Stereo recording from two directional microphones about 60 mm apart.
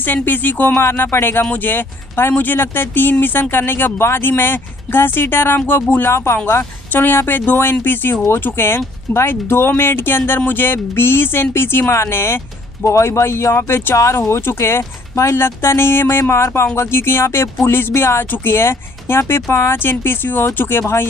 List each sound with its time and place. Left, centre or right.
0.0 s speech: left
13.9 s speech: left
14.2 s speech: left